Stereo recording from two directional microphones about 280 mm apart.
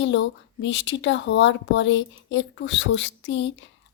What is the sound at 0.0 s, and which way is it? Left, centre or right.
Speech, left.